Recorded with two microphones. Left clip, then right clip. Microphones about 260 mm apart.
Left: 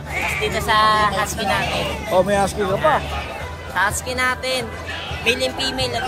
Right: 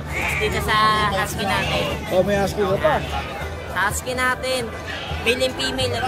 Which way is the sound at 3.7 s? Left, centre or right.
Centre.